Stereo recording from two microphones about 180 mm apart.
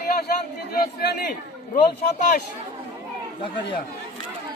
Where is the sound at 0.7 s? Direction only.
55° left (ahead or behind).